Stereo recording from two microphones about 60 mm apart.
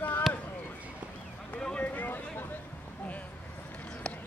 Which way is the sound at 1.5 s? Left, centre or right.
Centre.